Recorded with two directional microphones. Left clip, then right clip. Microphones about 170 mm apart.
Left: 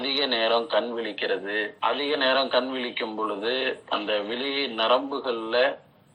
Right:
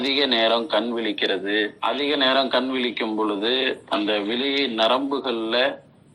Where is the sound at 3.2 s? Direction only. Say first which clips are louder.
Right 5 dB; 45° right (ahead or behind).